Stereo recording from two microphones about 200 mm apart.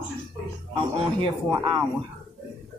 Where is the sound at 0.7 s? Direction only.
20° right (ahead or behind).